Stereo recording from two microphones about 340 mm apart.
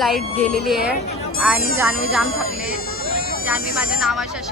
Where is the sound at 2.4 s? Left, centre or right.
Left.